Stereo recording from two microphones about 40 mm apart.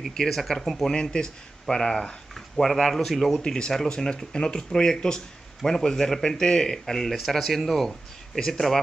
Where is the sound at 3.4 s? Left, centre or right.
Centre.